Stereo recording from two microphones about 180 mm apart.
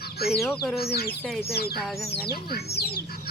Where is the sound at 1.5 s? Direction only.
60° left (ahead or behind).